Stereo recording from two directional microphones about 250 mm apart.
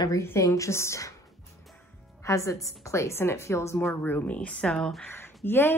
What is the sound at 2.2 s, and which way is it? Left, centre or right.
Speech, centre.